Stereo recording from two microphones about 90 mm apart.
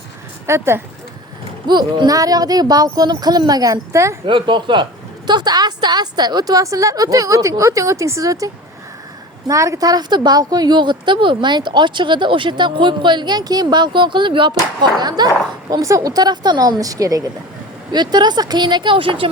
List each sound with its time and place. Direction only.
0.4 s speech: 30° right (ahead or behind)
1.6 s a woman's voice: 55° right (ahead or behind); by 4.2 s 35° right (ahead or behind)
4.3 s a woman's voice: 60° right (ahead or behind); by 8.4 s 40° right (ahead or behind)
9.5 s a woman's voice: 35° right (ahead or behind)
15.7 s speech: 40° right (ahead or behind)
17.9 s a woman's voice: 50° right (ahead or behind); by 19.3 s 75° right (ahead or behind)